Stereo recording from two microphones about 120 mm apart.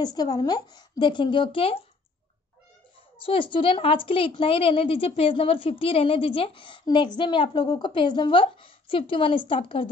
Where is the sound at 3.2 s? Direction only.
45° left (ahead or behind).